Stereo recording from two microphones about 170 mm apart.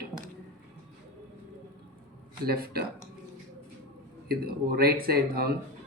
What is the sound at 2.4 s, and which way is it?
Speech, 65° right (ahead or behind).